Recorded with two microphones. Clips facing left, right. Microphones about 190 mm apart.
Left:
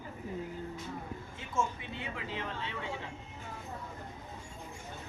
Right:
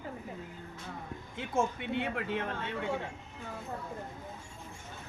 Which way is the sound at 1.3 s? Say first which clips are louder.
Right 4 dB; 65° right (ahead or behind).